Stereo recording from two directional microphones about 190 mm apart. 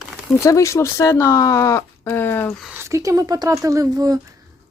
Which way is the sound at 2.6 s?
15° right (ahead or behind).